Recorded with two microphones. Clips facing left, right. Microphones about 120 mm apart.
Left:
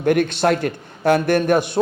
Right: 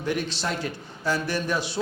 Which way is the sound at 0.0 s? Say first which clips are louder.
Left 11 dB; 55° left (ahead or behind).